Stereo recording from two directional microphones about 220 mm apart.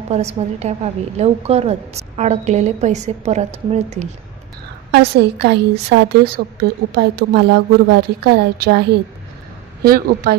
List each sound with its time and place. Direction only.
0.1 s a woman's voice: 30° right (ahead or behind)
4.9 s a woman's voice: 50° right (ahead or behind)